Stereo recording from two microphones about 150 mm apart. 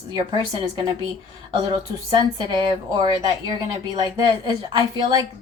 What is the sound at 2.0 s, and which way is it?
A woman's voice, 30° right (ahead or behind).